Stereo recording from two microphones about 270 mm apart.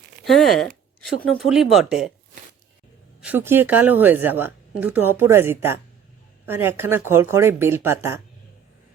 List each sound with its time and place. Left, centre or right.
0.3 s speech: centre
3.2 s speech: centre